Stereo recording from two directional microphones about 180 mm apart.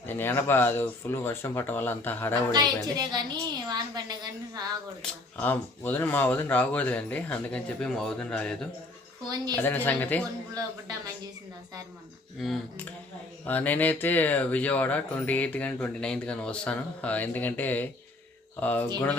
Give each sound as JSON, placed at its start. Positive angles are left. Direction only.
{"t": 0.1, "sound": "speech", "side_deg": 10}
{"t": 2.5, "sound": "a woman's voice", "side_deg": -25}
{"t": 5.0, "sound": "speech", "side_deg": 10}
{"t": 9.6, "sound": "speech", "side_deg": 10}
{"t": 10.5, "sound": "a woman's voice", "side_deg": -20}
{"t": 12.4, "sound": "speech", "side_deg": 0}